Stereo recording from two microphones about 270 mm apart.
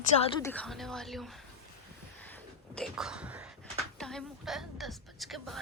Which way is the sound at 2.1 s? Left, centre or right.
Centre.